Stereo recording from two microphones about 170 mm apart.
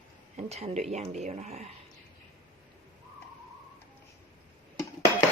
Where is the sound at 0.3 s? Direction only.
40° right (ahead or behind).